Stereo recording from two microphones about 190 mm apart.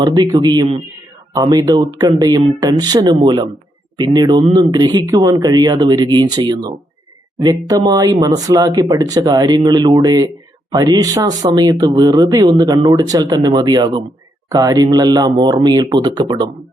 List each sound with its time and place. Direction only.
0.0 s speech: 20° right (ahead or behind)